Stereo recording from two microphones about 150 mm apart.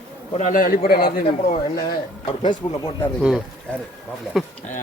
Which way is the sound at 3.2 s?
Centre (ahead or behind).